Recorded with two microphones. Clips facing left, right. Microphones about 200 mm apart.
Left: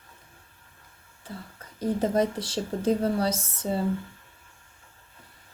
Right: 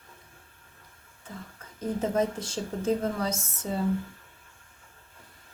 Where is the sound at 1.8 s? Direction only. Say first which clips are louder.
Left 3 dB; 35° left (ahead or behind).